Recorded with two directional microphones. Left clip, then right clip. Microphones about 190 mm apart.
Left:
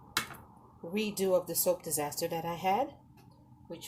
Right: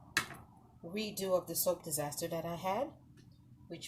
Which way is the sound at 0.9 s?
45° left (ahead or behind).